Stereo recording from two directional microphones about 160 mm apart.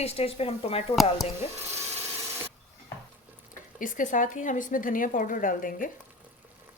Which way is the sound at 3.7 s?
55° left (ahead or behind).